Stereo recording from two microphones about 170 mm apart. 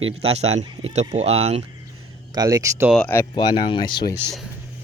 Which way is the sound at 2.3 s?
20° right (ahead or behind).